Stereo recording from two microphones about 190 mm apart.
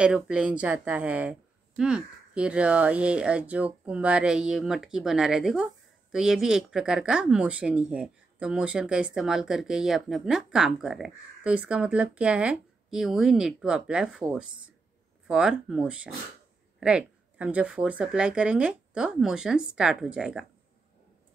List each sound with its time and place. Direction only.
0.0 s speech: 5° right (ahead or behind)